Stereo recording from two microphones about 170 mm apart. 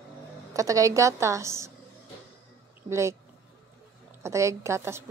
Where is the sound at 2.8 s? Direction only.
15° right (ahead or behind).